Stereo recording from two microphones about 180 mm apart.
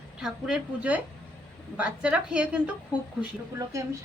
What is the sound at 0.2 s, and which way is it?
A woman's voice, centre (ahead or behind).